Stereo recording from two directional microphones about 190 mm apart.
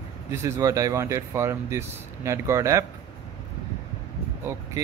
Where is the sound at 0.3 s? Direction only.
15° right (ahead or behind).